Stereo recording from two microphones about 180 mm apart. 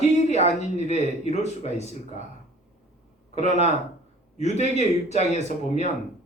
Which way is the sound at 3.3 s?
40° left (ahead or behind).